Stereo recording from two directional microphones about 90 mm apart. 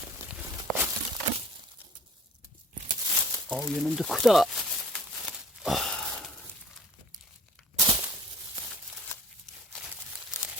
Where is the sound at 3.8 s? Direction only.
Centre (ahead or behind).